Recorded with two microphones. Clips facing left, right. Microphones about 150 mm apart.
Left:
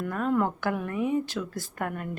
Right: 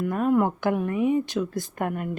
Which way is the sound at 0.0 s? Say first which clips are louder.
Right 4 dB; 15° right (ahead or behind).